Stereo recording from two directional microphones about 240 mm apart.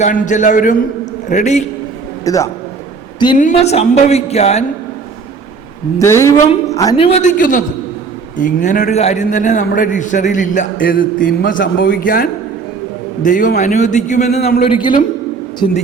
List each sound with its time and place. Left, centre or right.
0.0 s a man's voice: left
2.2 s a man's voice: centre
3.3 s a man's voice: left
6.0 s a man's voice: centre